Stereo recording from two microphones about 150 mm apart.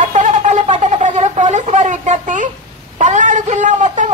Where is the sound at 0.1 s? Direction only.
55° right (ahead or behind).